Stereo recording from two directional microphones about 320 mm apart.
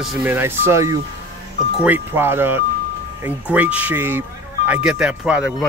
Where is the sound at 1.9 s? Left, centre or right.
Centre.